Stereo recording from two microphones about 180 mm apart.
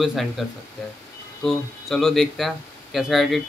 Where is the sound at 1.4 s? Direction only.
Centre (ahead or behind).